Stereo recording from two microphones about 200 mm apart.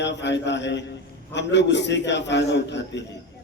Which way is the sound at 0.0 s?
60° left (ahead or behind).